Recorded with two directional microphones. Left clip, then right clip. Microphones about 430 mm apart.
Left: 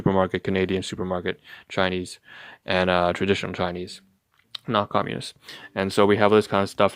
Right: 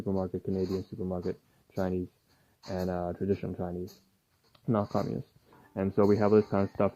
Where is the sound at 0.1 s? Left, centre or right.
Centre.